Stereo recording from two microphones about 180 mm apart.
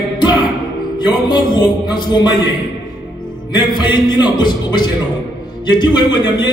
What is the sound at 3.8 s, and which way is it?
Speech, 25° left (ahead or behind).